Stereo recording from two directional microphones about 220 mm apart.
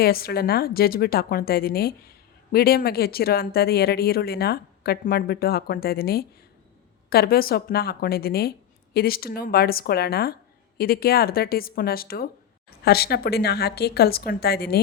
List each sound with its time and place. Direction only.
0.0 s a woman's voice: 45° left (ahead or behind)